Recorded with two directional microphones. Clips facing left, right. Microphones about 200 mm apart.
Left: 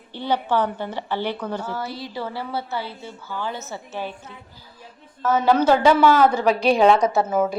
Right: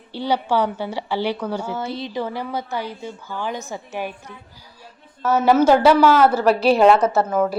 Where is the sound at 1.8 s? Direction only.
20° right (ahead or behind).